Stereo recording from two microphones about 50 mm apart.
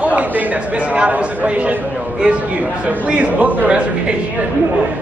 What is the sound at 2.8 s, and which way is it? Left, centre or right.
A man's voice, right.